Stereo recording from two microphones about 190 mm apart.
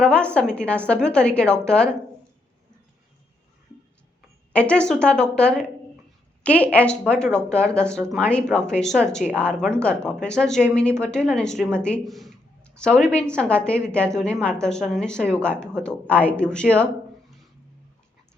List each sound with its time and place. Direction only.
0.0 s speech: 5° left (ahead or behind)
4.5 s speech: 5° left (ahead or behind)